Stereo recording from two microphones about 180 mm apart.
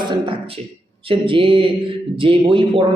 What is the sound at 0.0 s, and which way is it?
A man's voice, 30° right (ahead or behind).